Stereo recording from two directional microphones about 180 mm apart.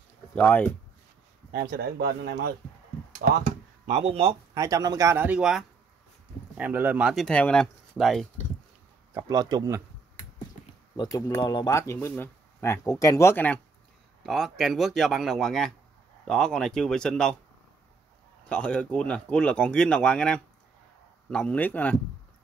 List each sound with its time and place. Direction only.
0.3 s speech: 10° left (ahead or behind)
1.5 s speech: 55° right (ahead or behind)
3.2 s a sound: 55° right (ahead or behind)
4.0 s speech: 30° right (ahead or behind)
4.6 s speech: 20° right (ahead or behind); by 8.3 s centre (ahead or behind)
9.1 s speech: 20° right (ahead or behind)
11.0 s speech: 20° left (ahead or behind)
14.2 s speech: centre (ahead or behind)
18.5 s speech: 5° left (ahead or behind)